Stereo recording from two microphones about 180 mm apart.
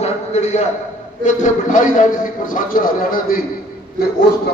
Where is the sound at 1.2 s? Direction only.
45° left (ahead or behind).